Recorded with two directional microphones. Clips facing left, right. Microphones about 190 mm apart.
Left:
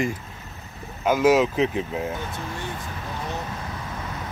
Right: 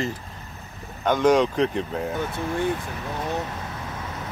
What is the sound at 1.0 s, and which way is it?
Speech, 5° left (ahead or behind).